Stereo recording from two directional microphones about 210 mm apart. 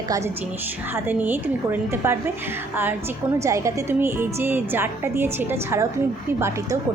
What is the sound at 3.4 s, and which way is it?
A woman's voice, 15° right (ahead or behind).